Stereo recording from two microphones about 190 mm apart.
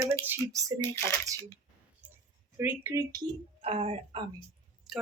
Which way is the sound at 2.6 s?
10° right (ahead or behind).